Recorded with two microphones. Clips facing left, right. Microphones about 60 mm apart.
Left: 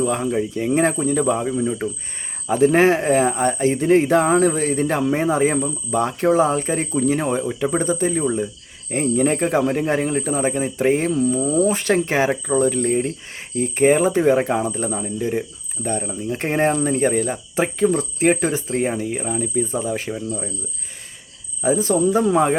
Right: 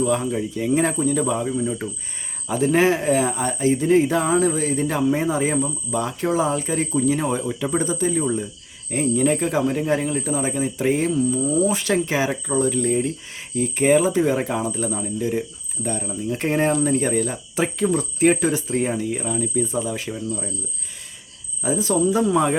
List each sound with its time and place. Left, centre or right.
0.0 s speech: left
21.6 s speech: left